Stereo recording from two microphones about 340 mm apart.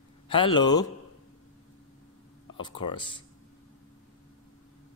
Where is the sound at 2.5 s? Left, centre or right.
Centre.